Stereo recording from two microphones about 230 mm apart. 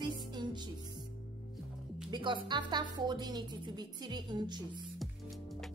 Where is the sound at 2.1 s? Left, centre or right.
Right.